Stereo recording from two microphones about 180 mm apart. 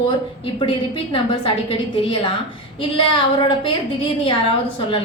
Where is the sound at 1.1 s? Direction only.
30° left (ahead or behind).